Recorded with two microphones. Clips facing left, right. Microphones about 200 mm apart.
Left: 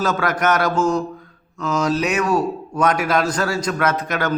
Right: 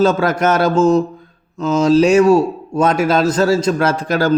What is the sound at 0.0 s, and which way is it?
A man's voice, 25° right (ahead or behind).